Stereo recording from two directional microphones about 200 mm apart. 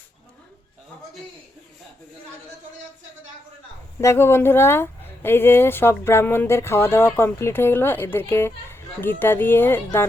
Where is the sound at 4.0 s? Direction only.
15° left (ahead or behind).